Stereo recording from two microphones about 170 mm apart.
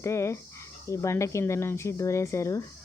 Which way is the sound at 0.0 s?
15° left (ahead or behind).